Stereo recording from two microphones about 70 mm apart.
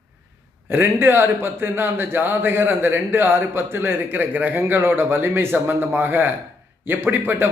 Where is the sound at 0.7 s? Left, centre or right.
Right.